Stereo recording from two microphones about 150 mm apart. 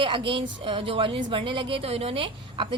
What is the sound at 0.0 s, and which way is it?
A woman's voice, 35° right (ahead or behind).